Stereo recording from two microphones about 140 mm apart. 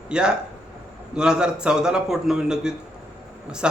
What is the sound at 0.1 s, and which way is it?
A man's voice, 5° right (ahead or behind).